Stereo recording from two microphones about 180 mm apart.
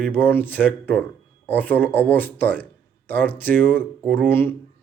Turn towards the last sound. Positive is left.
turn(degrees=10)  # may be behind; listen again after turning